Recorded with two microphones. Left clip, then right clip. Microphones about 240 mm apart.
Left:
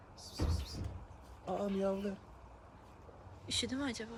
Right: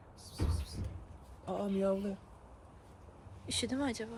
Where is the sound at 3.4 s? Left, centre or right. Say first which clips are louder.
Right 2 dB; centre.